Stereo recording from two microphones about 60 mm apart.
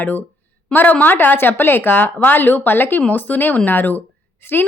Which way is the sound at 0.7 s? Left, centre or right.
Left.